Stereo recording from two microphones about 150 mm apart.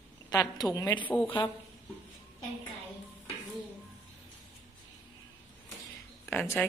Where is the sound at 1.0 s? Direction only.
10° left (ahead or behind).